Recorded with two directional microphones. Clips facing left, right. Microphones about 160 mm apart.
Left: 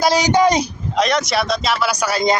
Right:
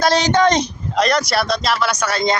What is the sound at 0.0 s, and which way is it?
Speech, 10° left (ahead or behind).